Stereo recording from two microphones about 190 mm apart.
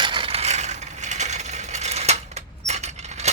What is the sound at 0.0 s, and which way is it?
Coin, 25° right (ahead or behind).